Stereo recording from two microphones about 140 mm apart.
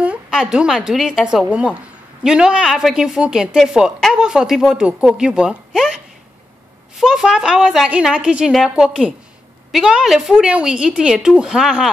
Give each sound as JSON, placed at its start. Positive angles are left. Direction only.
{"t": 0.0, "sound": "speech", "side_deg": -5}
{"t": 7.0, "sound": "speech", "side_deg": -5}